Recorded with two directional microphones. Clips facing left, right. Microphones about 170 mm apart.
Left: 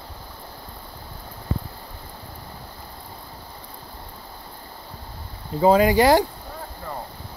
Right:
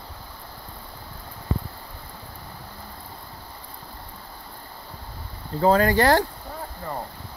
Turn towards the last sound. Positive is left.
turn(degrees=10)  # may be behind; listen again after turning